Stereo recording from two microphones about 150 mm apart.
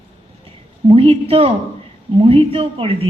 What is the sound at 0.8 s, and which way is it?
A woman's voice, 40° right (ahead or behind).